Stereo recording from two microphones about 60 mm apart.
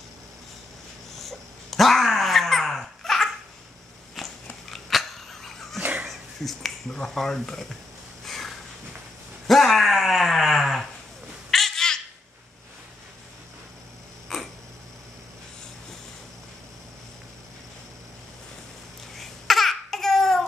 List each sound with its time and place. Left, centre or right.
1.1 s dog: centre
4.1 s biting: centre
5.8 s a sound: right
6.0 s speech: centre
8.3 s sniff: centre
9.5 s a sound: centre
11.5 s bird: centre
14.3 s a sound: centre
19.1 s babbling: centre